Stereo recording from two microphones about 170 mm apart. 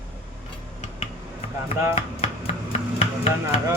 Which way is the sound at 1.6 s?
35° left (ahead or behind).